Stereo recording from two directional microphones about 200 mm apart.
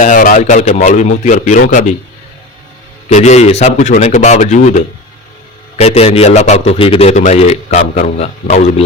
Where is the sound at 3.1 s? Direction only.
35° left (ahead or behind).